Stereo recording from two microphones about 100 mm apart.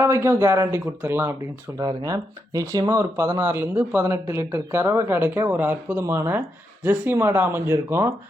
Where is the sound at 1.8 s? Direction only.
40° right (ahead or behind).